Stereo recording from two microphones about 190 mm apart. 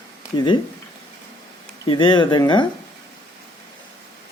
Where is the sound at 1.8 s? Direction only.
25° left (ahead or behind).